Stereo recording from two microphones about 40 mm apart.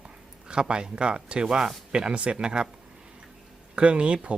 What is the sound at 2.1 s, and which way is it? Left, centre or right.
Speech, right.